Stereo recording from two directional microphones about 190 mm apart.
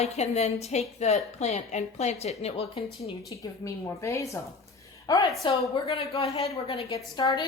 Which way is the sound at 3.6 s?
15° left (ahead or behind).